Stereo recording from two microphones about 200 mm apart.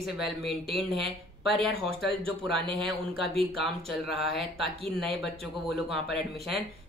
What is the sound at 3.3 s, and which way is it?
Speech, 25° right (ahead or behind).